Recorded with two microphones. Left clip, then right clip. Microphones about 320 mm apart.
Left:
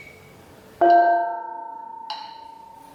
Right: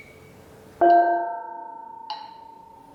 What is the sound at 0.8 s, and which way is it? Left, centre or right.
Music, centre.